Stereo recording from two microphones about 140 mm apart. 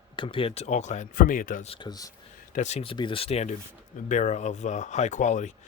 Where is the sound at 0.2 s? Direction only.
40° left (ahead or behind); by 1.6 s 75° left (ahead or behind).